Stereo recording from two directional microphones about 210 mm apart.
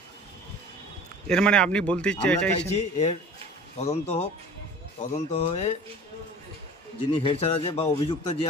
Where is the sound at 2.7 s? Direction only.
30° left (ahead or behind).